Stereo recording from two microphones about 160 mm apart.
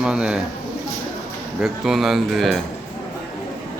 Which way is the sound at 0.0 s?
5° right (ahead or behind).